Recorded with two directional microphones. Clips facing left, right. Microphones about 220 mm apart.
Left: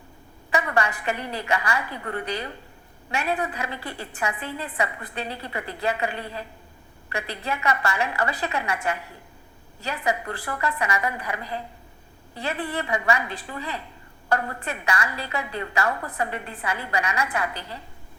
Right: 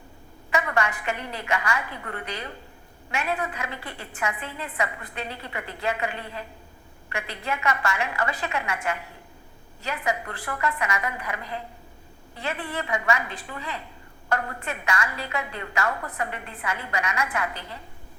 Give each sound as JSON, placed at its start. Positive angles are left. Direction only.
{"t": 0.5, "sound": "a woman's voice", "side_deg": 35}